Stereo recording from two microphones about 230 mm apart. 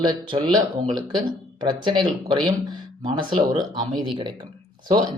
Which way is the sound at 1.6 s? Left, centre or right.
Centre.